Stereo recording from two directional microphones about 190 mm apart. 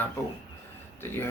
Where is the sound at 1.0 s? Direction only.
10° left (ahead or behind).